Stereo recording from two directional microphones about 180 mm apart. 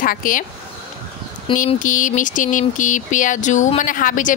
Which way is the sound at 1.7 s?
45° left (ahead or behind).